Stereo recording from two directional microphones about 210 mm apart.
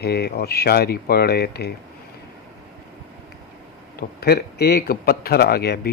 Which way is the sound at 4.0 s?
50° left (ahead or behind).